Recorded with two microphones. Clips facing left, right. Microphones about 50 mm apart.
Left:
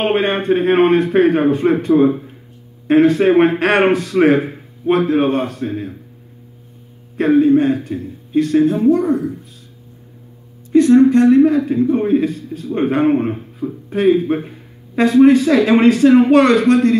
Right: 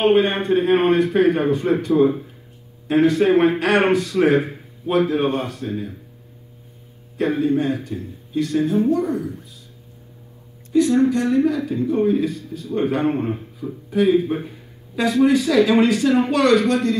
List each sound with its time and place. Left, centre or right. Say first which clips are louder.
0.0 s a man's voice: even; left
3.1 s a man's voice: left 4 dB; left
4.4 s a sound: left 2 dB; centre
4.9 s a man's voice: left 3 dB; left
7.2 s a man's voice: left 8 dB; left
10.7 s a man's voice: left 7 dB; left
14.0 s a man's voice: left 4 dB; centre
15.2 s a man's voice: left 2 dB; left